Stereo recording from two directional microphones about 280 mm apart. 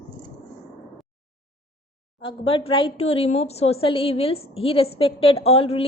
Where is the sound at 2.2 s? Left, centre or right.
Centre.